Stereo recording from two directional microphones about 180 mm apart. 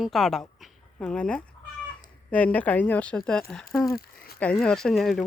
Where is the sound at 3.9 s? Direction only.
55° left (ahead or behind).